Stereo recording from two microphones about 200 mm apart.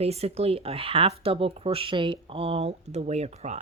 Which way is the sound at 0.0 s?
30° right (ahead or behind).